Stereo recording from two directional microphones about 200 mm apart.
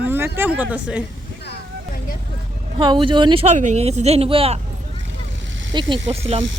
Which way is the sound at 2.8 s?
25° right (ahead or behind).